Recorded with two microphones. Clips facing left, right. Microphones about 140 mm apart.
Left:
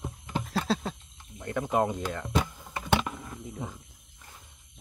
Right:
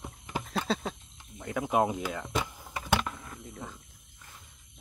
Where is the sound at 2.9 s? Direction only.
5° left (ahead or behind).